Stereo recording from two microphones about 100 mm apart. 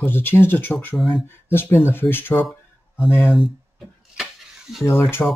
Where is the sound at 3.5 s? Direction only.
5° right (ahead or behind).